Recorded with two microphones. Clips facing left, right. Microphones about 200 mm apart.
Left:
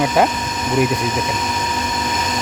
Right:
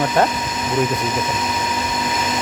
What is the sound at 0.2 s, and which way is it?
Speech, 10° left (ahead or behind).